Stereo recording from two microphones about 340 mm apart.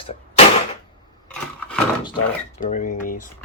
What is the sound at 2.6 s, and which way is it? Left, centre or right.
Speech, left.